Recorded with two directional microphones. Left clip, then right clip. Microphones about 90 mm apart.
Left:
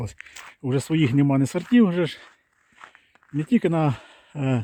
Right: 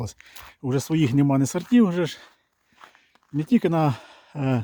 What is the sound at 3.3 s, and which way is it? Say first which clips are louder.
Speech: even; 20° right (ahead or behind).